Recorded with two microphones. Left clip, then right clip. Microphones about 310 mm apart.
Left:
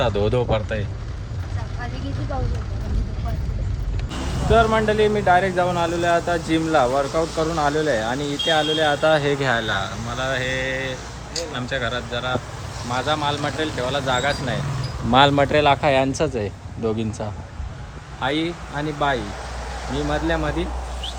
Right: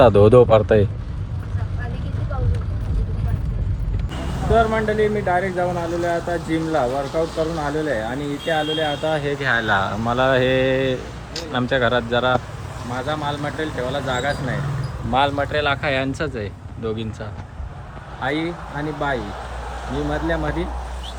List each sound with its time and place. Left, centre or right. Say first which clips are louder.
0.3 s speech: right 10 dB; centre
4.5 s speech: left 1 dB; centre
9.0 s speech: left 4 dB; left
9.4 s speech: right 3 dB; centre
15.1 s speech: left 4 dB; left
15.5 s speech: left 4 dB; centre